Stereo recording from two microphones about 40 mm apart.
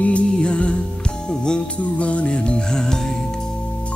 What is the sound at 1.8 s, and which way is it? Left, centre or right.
Music, left.